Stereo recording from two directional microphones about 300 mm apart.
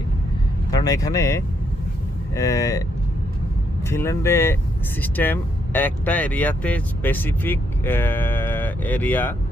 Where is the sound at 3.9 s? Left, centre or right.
Centre.